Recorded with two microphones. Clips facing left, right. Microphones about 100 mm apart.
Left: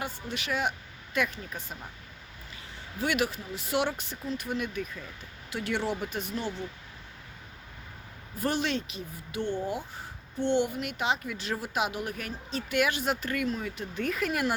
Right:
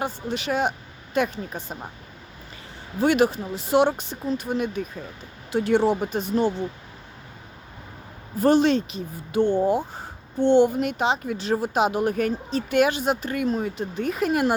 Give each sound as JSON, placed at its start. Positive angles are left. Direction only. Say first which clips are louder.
{"t": 0.0, "sound": "speech", "louder": "right 8 dB", "side_deg": -30}
{"t": 3.0, "sound": "speech", "louder": "right 10 dB", "side_deg": -35}
{"t": 8.4, "sound": "speech", "louder": "right 11 dB", "side_deg": -35}